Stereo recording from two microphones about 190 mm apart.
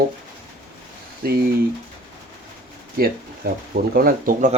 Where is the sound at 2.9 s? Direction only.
50° right (ahead or behind).